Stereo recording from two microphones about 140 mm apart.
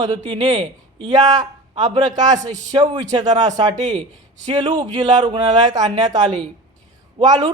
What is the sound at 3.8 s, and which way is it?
Speech, 60° right (ahead or behind).